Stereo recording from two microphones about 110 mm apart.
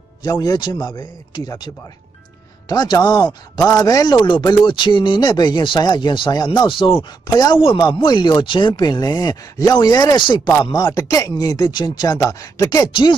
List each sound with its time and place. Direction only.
0.2 s speech: 35° left (ahead or behind)
2.7 s speech: 40° left (ahead or behind)
7.3 s speech: 35° left (ahead or behind)